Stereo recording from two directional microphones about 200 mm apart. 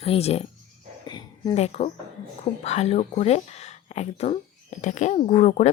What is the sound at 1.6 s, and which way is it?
Speech, 30° left (ahead or behind).